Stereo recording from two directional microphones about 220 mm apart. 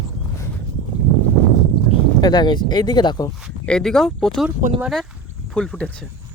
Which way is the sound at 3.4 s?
5° left (ahead or behind).